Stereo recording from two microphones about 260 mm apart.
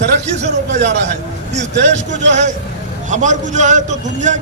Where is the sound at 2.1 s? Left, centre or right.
Right.